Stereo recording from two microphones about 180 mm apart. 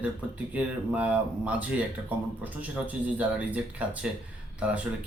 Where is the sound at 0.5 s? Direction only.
10° right (ahead or behind).